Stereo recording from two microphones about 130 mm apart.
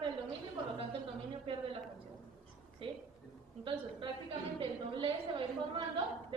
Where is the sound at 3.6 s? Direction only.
40° right (ahead or behind).